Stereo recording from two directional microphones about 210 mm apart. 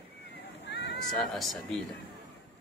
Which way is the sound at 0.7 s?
55° left (ahead or behind).